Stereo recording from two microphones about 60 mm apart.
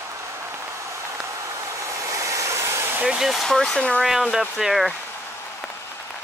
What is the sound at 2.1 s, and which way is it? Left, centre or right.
Vehicle, right.